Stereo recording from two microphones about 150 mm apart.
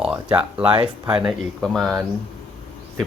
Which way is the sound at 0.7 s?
35° right (ahead or behind).